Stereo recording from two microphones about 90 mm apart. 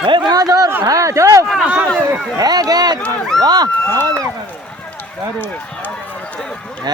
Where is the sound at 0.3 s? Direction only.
40° right (ahead or behind).